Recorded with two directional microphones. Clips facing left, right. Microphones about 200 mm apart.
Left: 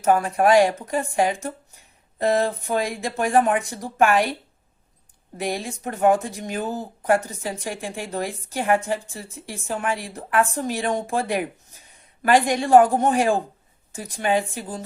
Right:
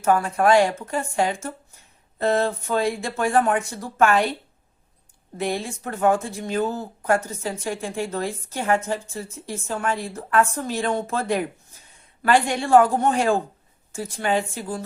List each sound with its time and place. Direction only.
0.0 s speech: 15° left (ahead or behind)
5.4 s speech: 15° left (ahead or behind)